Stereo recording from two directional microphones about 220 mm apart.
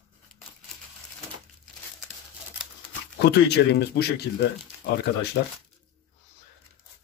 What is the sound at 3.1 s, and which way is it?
Speech, 50° left (ahead or behind).